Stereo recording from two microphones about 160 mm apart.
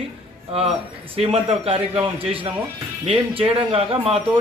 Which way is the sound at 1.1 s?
35° right (ahead or behind).